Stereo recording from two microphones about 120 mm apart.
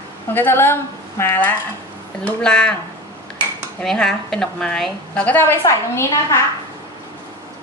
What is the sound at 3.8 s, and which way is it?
A woman's voice, 5° left (ahead or behind).